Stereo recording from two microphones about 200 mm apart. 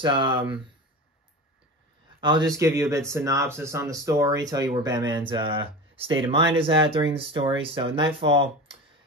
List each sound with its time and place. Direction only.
0.0 s speech: 25° right (ahead or behind)
2.1 s speech: 25° right (ahead or behind)